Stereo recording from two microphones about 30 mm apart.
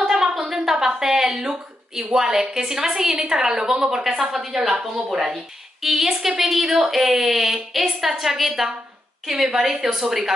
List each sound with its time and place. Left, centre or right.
0.0 s a sound: centre
2.1 s a woman's voice: centre
5.2 s a woman's voice: centre
9.5 s speech: right